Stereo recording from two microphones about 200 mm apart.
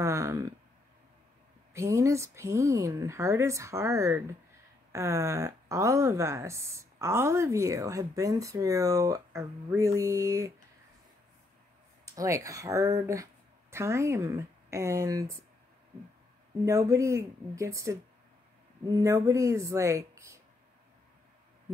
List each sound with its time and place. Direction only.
0.0 s speech: 15° right (ahead or behind)
1.7 s speech: 15° right (ahead or behind)
12.2 s speech: 15° right (ahead or behind)
16.6 s speech: 15° right (ahead or behind)
18.9 s speech: 15° right (ahead or behind)